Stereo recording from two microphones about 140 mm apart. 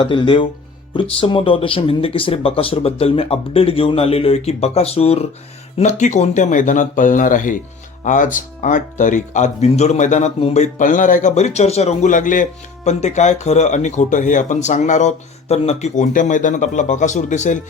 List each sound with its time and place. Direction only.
0.0 s speech: 35° left (ahead or behind); by 17.6 s 60° left (ahead or behind)